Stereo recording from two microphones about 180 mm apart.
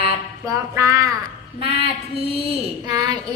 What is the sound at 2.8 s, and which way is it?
Speech, 20° right (ahead or behind).